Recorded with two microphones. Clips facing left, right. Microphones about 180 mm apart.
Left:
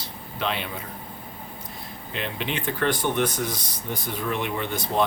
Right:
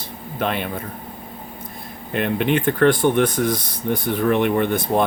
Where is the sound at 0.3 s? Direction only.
50° right (ahead or behind).